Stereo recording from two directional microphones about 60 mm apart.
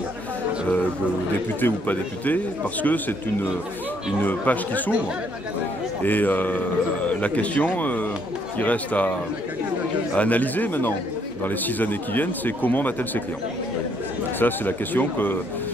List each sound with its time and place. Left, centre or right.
1.6 s speech: left
6.0 s speech: left
10.1 s speech: left
14.4 s speech: left